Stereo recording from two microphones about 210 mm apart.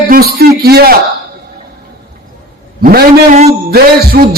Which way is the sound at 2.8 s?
45° right (ahead or behind).